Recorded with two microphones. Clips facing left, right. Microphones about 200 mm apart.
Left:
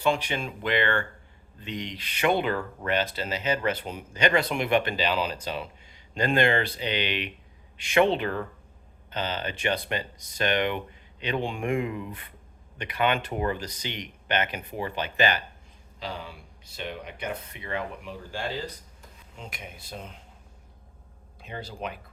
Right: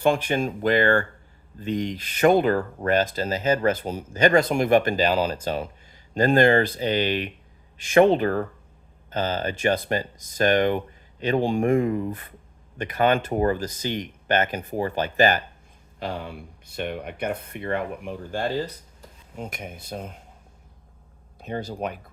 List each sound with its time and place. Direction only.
0.0 s speech: 50° right (ahead or behind)
21.4 s speech: 45° right (ahead or behind)